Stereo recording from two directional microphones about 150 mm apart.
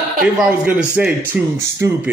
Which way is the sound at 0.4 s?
5° right (ahead or behind).